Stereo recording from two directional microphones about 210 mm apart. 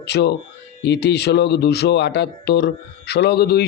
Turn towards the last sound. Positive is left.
turn(degrees=50)  # may be behind; listen again after turning